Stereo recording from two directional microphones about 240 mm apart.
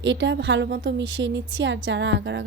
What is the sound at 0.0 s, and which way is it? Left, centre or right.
A woman's voice, right.